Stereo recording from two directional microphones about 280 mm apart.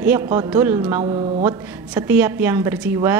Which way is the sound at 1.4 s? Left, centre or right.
Centre.